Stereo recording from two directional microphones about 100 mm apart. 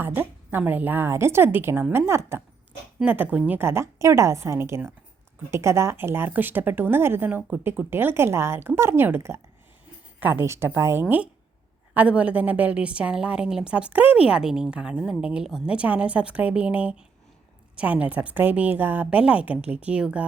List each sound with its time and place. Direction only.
0.0 s a woman's voice: 20° right (ahead or behind)
3.0 s a woman's voice: 15° right (ahead or behind)
11.9 s a woman's voice: 15° right (ahead or behind)